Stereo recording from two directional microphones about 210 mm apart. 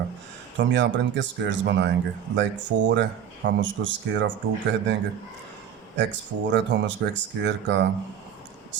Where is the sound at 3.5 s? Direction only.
60° right (ahead or behind).